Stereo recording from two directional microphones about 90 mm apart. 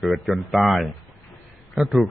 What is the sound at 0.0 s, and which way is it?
A man's voice, centre (ahead or behind).